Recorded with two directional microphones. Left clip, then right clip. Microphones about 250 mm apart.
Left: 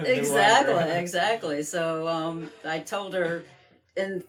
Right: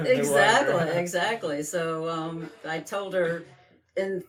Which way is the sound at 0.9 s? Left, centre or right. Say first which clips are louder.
Left 1 dB; centre.